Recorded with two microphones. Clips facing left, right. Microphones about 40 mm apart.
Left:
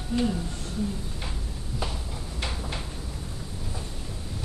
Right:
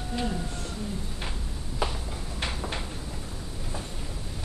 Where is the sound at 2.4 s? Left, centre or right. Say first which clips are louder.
Right 1 dB; centre.